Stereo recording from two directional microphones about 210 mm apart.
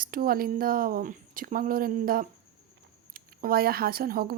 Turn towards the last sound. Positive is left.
turn(degrees=-45)  # may be behind; listen again after turning